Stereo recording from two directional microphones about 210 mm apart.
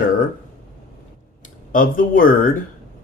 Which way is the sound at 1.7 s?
40° left (ahead or behind).